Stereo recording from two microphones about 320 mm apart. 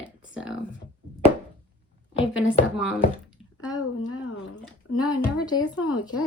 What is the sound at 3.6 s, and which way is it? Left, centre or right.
Speech, left.